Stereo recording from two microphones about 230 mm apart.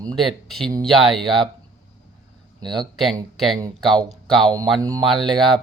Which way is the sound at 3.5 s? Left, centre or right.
Centre.